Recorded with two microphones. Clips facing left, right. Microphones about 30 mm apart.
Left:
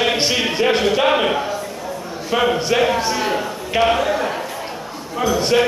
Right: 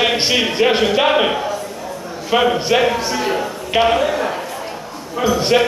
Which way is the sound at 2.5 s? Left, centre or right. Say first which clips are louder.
Right 2 dB; centre.